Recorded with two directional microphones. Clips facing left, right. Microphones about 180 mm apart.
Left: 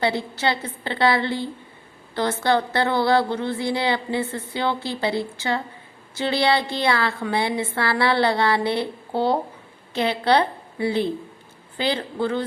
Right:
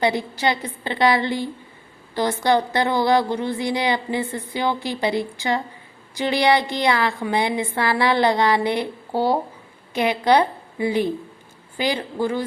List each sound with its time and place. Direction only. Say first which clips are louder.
0.0 s a woman's voice: right 2 dB; 15° right (ahead or behind)